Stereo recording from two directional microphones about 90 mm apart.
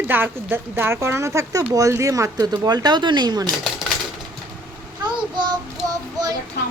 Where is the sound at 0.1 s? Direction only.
25° right (ahead or behind).